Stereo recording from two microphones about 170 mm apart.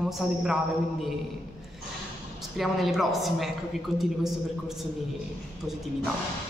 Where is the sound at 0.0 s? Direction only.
Centre (ahead or behind).